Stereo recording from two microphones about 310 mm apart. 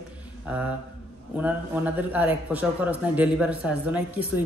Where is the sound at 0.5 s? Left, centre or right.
Centre.